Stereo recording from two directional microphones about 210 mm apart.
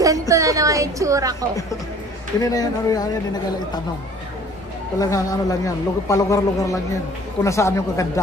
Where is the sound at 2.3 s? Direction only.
15° left (ahead or behind).